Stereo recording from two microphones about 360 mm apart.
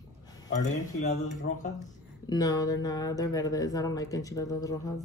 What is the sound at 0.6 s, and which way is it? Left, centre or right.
Speech, left.